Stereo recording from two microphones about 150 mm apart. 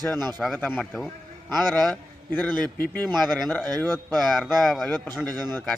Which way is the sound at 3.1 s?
Centre (ahead or behind).